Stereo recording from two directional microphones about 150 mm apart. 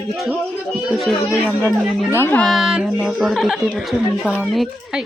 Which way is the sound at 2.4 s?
Centre (ahead or behind).